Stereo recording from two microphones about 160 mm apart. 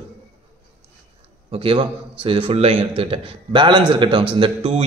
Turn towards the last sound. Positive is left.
turn(degrees=-35)  # may be behind; listen again after turning